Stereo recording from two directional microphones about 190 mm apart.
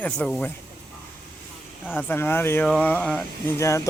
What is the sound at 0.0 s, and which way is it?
Speech, 5° left (ahead or behind).